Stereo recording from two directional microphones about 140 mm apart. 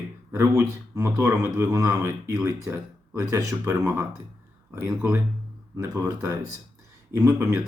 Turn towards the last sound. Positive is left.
turn(degrees=-20)  # may be behind; listen again after turning